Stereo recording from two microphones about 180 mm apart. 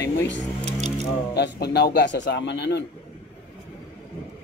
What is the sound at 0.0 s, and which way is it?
A man's voice, 70° left (ahead or behind).